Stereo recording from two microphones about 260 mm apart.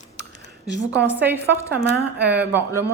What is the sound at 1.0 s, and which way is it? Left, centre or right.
Speech, centre.